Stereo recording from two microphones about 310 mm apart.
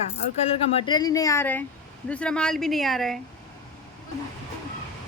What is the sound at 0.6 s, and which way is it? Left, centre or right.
A woman's voice, centre.